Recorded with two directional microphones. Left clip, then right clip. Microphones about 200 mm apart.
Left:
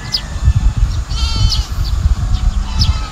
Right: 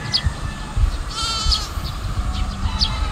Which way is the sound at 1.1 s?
45° right (ahead or behind).